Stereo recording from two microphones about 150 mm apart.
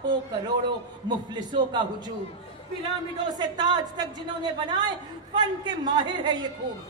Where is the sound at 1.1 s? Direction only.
30° right (ahead or behind).